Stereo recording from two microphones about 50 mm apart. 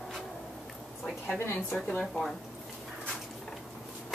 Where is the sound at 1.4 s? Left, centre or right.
Left.